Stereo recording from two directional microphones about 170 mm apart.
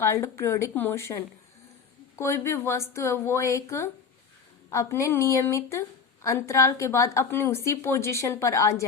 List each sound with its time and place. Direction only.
0.0 s a woman's voice: 15° left (ahead or behind)